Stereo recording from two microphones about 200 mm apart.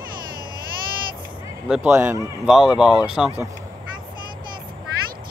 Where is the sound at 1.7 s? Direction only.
10° right (ahead or behind).